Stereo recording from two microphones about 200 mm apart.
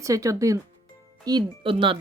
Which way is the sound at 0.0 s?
15° right (ahead or behind).